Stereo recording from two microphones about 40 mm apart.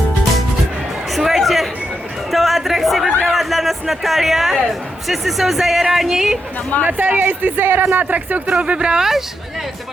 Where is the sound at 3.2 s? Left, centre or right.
Centre.